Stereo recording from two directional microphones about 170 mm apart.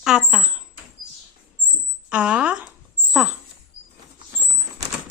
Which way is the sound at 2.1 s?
5° right (ahead or behind).